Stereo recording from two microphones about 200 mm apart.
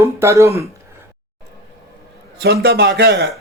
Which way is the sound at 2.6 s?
55° right (ahead or behind).